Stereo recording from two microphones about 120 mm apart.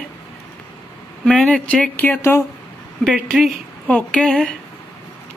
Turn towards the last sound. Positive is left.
turn(degrees=5)  # may be behind; listen again after turning